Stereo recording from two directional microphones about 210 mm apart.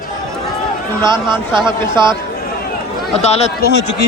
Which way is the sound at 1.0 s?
20° right (ahead or behind).